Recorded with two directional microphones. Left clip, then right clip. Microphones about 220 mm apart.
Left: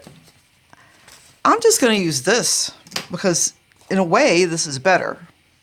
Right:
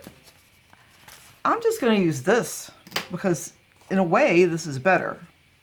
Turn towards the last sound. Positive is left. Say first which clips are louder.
# left 4 dB
turn(degrees=50)  # may be behind; listen again after turning